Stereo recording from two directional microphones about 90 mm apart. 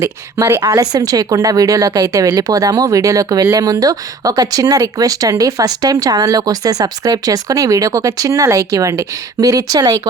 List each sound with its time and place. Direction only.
0.0 s a woman's voice: 30° right (ahead or behind)
0.7 s a woman's voice: 40° right (ahead or behind)